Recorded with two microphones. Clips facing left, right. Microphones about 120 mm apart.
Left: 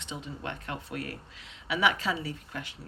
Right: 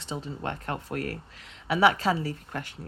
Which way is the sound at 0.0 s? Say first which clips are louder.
Right 4 dB; 40° right (ahead or behind).